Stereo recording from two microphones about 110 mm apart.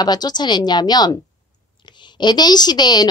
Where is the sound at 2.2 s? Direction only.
40° left (ahead or behind).